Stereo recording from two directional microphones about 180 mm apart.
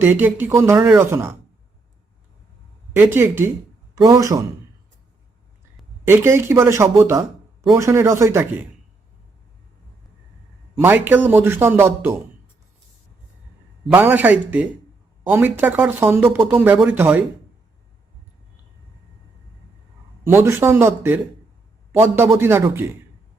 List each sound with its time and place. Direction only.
0.0 s speech: 10° right (ahead or behind)
3.2 s a man's voice: 10° right (ahead or behind)
6.1 s speech: 15° right (ahead or behind)
10.8 s speech: 10° right (ahead or behind)
13.9 s speech: 10° right (ahead or behind)
20.2 s speech: 15° right (ahead or behind)